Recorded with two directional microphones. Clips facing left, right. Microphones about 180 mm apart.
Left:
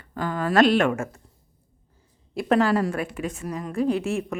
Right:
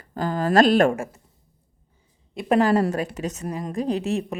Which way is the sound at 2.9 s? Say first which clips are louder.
Right 2 dB; 40° right (ahead or behind).